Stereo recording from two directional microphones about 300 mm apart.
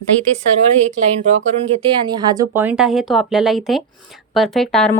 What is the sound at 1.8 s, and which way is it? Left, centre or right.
Speech, centre.